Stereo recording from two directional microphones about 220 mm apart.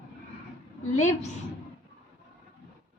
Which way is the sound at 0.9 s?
30° left (ahead or behind).